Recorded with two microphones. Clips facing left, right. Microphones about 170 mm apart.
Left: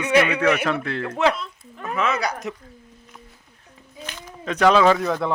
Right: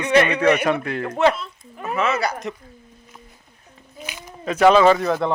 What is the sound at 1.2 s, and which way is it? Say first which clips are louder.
Speech: right 3 dB; centre (ahead or behind).